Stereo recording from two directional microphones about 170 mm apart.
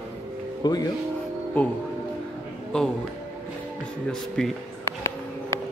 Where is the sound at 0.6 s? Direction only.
25° left (ahead or behind).